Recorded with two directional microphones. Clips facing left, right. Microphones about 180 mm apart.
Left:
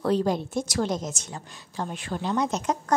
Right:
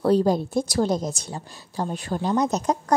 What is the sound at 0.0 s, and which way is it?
A woman's voice, 35° right (ahead or behind).